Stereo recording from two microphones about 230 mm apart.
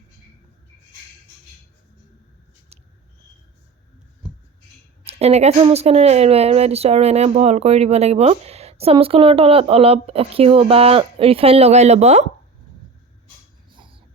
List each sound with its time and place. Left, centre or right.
5.0 s a woman's voice: right
13.7 s whispering: right